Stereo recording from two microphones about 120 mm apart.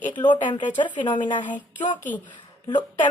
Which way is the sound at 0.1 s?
40° left (ahead or behind).